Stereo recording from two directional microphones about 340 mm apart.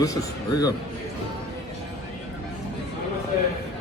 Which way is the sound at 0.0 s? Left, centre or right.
Centre.